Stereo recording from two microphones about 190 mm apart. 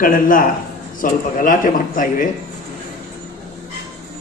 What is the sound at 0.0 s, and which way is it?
A man's voice, 45° left (ahead or behind).